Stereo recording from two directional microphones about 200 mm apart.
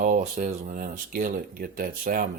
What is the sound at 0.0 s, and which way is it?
Speech, 40° right (ahead or behind).